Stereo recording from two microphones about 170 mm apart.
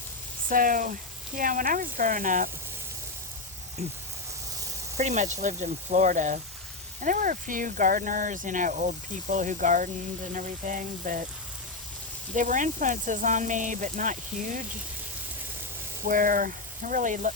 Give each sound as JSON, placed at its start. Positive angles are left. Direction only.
{"t": 0.4, "sound": "speech", "side_deg": -55}
{"t": 4.9, "sound": "speech", "side_deg": -40}
{"t": 12.3, "sound": "speech", "side_deg": -50}
{"t": 16.0, "sound": "speech", "side_deg": -55}